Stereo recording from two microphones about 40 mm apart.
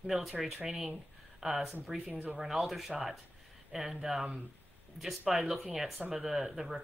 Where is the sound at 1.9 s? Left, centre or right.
Centre.